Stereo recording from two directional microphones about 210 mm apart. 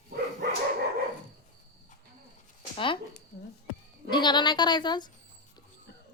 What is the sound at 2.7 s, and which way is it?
Speech, 25° left (ahead or behind).